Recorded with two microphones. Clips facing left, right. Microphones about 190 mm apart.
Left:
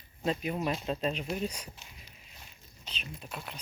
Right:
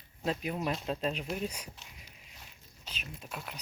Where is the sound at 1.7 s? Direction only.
Centre (ahead or behind).